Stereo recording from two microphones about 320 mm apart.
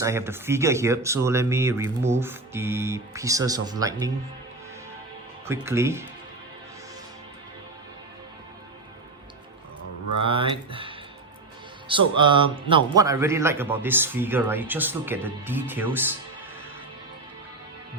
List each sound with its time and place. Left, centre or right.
0.0 s a man's voice: centre
5.5 s a man's voice: centre
10.2 s a man's voice: centre